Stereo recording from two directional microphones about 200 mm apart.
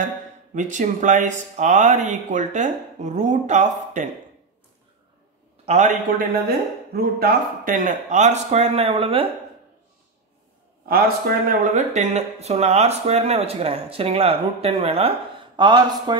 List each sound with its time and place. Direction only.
0.6 s speech: 40° right (ahead or behind)
5.7 s speech: 40° right (ahead or behind)
6.9 s speech: 50° right (ahead or behind); by 9.3 s 25° right (ahead or behind)
10.9 s speech: 45° right (ahead or behind); by 16.2 s 20° right (ahead or behind)